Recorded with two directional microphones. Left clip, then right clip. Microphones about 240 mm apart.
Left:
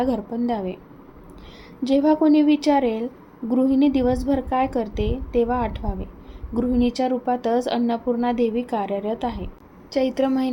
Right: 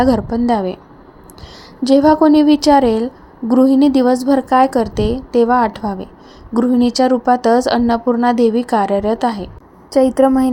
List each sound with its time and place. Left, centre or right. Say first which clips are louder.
0.0 s a woman's voice: right 9 dB; centre
1.8 s a woman's voice: right 8 dB; centre